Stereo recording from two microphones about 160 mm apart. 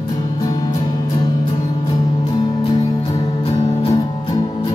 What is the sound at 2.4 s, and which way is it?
Music, 25° left (ahead or behind).